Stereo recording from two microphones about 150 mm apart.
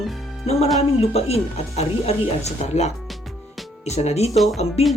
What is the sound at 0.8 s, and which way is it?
Speech, 45° left (ahead or behind).